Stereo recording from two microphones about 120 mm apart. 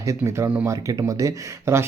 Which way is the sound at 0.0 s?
25° right (ahead or behind).